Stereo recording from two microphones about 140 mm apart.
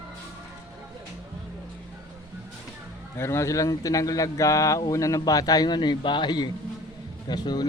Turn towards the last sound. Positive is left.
turn(degrees=30)  # may be behind; listen again after turning